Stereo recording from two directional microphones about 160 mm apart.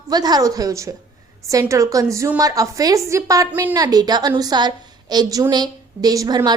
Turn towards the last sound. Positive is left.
turn(degrees=-25)  # may be behind; listen again after turning